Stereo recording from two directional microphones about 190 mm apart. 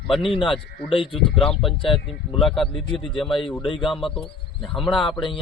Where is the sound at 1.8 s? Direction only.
25° left (ahead or behind).